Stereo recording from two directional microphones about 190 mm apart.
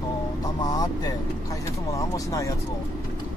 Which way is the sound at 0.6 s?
20° left (ahead or behind).